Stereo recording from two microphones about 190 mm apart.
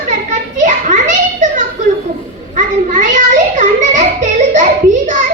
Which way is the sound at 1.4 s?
40° right (ahead or behind).